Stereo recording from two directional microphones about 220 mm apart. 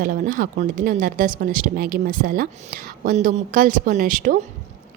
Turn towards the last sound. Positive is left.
turn(degrees=-40)  # may be behind; listen again after turning